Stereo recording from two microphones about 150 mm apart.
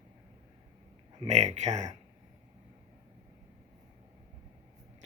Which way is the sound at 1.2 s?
45° right (ahead or behind).